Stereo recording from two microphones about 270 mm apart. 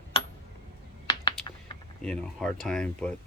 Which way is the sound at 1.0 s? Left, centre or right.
Centre.